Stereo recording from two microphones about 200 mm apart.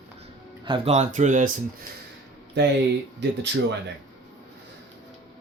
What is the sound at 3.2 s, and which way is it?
Speech, 60° right (ahead or behind).